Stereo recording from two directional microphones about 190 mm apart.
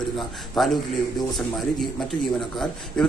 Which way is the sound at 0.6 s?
Centre (ahead or behind).